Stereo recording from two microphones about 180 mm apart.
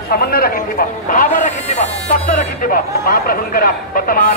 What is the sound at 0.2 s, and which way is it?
A man's voice, 55° left (ahead or behind).